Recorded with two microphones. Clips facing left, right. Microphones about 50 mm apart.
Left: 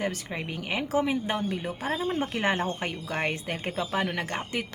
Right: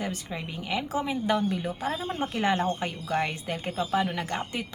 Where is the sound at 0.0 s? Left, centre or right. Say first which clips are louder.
Left 2 dB; left.